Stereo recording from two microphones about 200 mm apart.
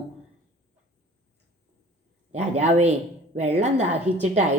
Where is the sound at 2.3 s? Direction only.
35° right (ahead or behind).